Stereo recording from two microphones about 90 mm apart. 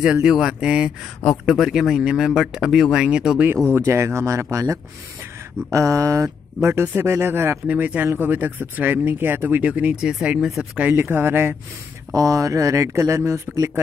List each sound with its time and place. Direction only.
0.0 s speech: 10° right (ahead or behind)
3.7 s speech: 30° right (ahead or behind); by 10.5 s 10° right (ahead or behind)
10.8 s speech: 20° right (ahead or behind)
12.1 s speech: 40° right (ahead or behind)